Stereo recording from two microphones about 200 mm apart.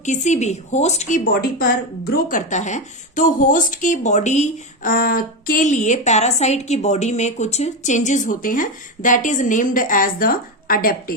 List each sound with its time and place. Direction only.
0.0 s a woman's voice: 35° left (ahead or behind)